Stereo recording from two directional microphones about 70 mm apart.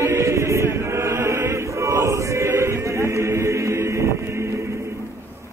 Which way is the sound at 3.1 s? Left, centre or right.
Right.